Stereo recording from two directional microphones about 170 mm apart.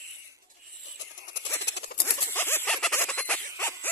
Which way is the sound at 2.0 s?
15° left (ahead or behind).